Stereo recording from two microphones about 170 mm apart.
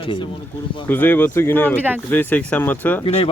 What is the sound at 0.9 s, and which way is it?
Speech, 10° left (ahead or behind).